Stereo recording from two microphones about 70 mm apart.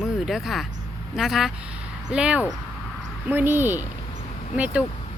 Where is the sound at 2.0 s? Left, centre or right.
Centre.